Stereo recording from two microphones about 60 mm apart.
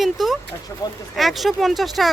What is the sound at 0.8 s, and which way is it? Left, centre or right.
Speech, left.